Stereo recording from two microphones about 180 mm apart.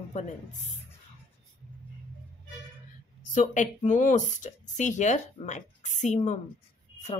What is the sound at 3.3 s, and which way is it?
Speech, 45° left (ahead or behind).